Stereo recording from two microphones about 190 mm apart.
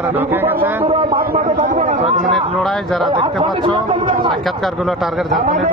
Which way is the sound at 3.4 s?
25° right (ahead or behind).